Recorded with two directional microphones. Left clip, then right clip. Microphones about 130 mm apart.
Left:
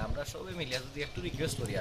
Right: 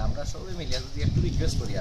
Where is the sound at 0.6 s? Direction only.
20° left (ahead or behind).